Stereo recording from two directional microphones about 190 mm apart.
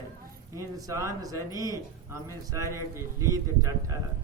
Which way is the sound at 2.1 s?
15° right (ahead or behind).